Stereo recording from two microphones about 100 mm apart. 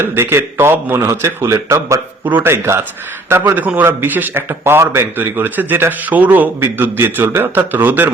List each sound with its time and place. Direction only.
0.0 s a man's voice: 25° right (ahead or behind)